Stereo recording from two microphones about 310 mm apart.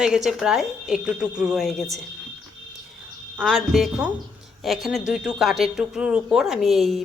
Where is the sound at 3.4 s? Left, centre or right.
Centre.